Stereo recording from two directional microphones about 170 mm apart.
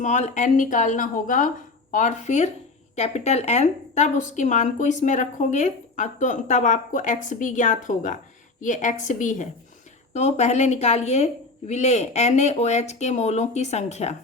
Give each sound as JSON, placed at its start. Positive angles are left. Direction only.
{"t": 0.0, "sound": "a woman's voice", "side_deg": 45}